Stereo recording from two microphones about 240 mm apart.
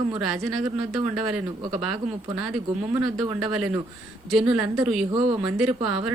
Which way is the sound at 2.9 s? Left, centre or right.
Centre.